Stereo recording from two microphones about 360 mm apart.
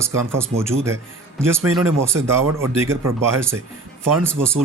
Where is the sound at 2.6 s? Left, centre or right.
Centre.